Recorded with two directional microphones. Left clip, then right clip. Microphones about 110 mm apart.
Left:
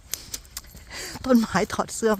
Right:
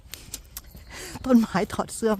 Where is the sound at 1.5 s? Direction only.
5° right (ahead or behind).